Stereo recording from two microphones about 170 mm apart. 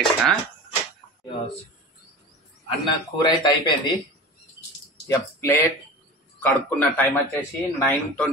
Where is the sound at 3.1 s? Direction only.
25° left (ahead or behind).